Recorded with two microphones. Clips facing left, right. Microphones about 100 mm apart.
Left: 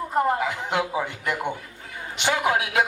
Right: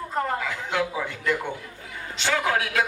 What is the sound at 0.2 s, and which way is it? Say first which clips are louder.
Speech: left 5 dB; 20° left (ahead or behind).